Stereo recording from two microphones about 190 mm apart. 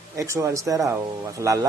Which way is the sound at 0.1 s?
15° right (ahead or behind).